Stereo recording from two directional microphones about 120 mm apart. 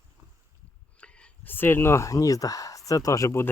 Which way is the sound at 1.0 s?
15° left (ahead or behind).